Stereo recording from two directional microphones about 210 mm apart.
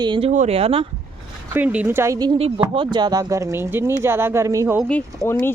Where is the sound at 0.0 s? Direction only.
25° right (ahead or behind).